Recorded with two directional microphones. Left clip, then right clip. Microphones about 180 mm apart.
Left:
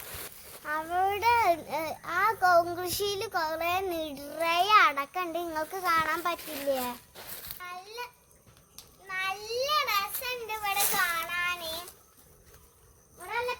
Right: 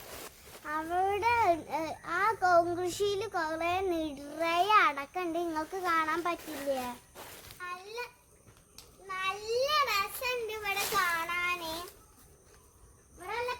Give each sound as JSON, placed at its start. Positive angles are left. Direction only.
{"t": 0.6, "sound": "a child's voice", "side_deg": 40}
{"t": 7.6, "sound": "a sound", "side_deg": -10}
{"t": 9.0, "sound": "child singing", "side_deg": -10}